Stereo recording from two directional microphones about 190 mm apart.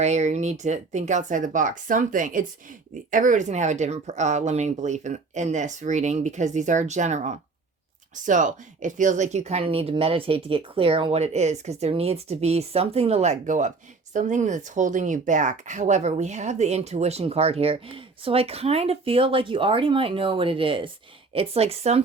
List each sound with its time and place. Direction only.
0.0 s speech: 35° right (ahead or behind)